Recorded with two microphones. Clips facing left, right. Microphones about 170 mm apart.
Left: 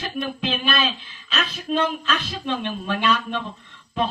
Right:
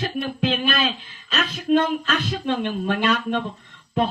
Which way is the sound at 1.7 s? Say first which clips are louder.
Right 4 dB; 45° right (ahead or behind).